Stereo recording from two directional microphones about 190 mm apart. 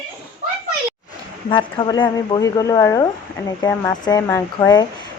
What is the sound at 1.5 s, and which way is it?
A woman's voice, 25° left (ahead or behind).